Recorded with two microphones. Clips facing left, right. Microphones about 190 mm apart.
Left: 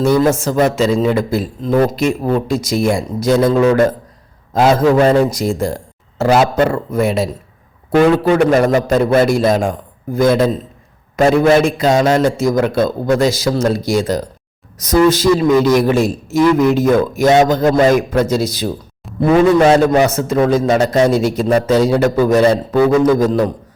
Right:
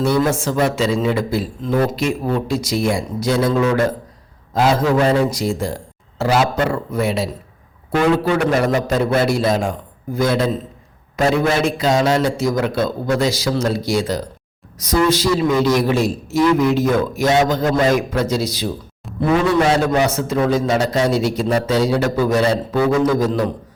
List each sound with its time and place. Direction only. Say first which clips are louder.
0.0 s a man's voice: left 4 dB; 45° left (ahead or behind)